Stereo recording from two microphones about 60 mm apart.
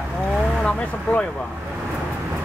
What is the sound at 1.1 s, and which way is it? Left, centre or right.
Speech, left.